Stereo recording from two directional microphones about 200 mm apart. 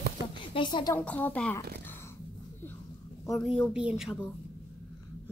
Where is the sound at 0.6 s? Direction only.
25° left (ahead or behind).